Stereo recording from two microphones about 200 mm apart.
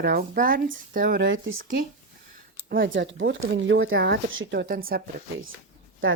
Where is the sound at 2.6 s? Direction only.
45° right (ahead or behind).